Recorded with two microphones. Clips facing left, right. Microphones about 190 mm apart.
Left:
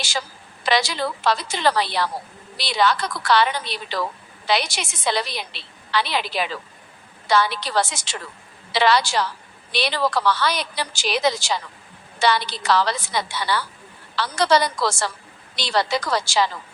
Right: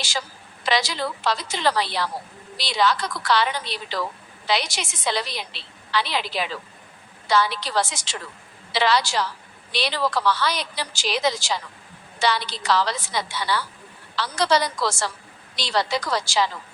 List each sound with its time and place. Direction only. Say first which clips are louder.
0.6 s a woman's voice: left 2 dB; 60° left (ahead or behind)